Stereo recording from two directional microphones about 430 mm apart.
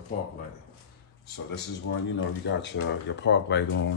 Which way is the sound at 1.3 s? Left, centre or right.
Left.